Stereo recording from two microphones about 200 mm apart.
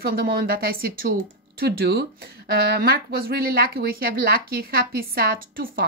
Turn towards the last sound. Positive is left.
turn(degrees=-45)  # may be behind; listen again after turning